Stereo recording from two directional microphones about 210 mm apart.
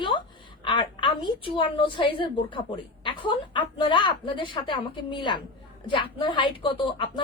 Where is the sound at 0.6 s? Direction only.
25° left (ahead or behind).